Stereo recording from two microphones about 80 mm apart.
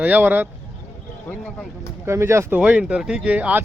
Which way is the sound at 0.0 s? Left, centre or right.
Centre.